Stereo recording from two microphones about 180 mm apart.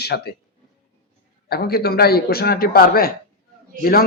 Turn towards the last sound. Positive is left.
turn(degrees=55)  # may be behind; listen again after turning